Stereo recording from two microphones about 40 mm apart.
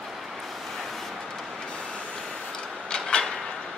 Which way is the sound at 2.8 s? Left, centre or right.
Centre.